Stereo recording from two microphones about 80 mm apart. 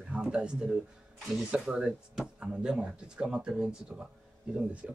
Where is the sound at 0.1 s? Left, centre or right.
Centre.